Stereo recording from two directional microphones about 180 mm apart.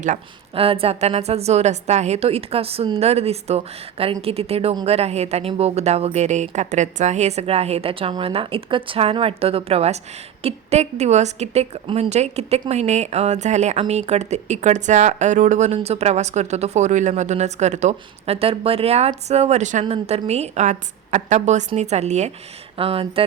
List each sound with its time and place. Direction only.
0.5 s a woman's voice: 30° right (ahead or behind)